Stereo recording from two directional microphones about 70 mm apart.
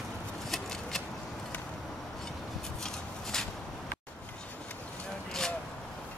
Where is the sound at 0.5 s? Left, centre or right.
Centre.